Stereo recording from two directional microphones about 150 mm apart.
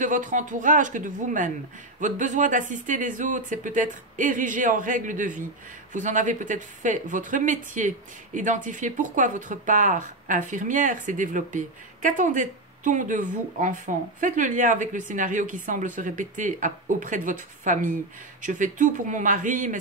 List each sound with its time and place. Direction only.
0.0 s speech: 55° right (ahead or behind)